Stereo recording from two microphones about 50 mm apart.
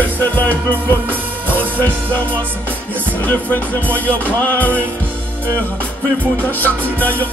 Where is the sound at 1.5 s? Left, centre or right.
Right.